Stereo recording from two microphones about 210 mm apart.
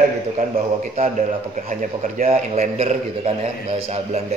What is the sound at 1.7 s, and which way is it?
A man's voice, 35° right (ahead or behind).